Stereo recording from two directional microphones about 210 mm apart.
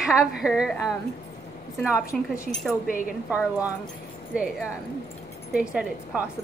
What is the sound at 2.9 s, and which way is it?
Speech, 40° left (ahead or behind).